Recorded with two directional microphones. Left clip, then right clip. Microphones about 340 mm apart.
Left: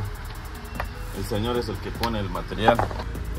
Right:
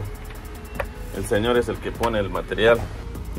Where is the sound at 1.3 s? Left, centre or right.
Centre.